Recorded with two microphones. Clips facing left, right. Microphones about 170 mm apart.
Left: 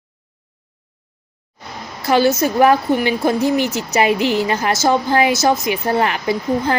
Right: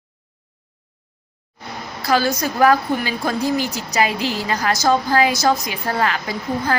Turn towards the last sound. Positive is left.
turn(degrees=20)  # may be behind; listen again after turning